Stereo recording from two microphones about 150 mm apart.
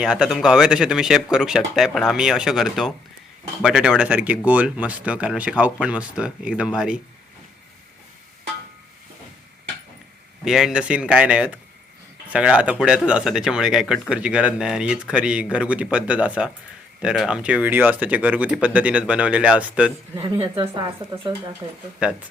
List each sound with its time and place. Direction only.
0.0 s speech: 5° right (ahead or behind)
10.4 s speech: 5° right (ahead or behind)
20.1 s a woman's voice: 40° right (ahead or behind)
22.0 s speech: 5° right (ahead or behind)